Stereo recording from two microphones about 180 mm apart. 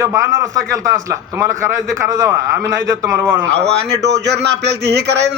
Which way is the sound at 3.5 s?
70° right (ahead or behind).